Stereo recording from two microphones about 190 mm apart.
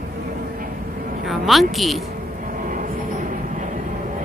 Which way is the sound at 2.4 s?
45° right (ahead or behind).